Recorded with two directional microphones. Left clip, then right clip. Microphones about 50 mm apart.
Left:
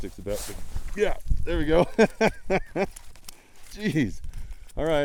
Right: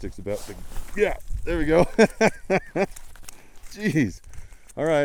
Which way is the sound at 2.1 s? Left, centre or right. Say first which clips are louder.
Right 3 dB; right.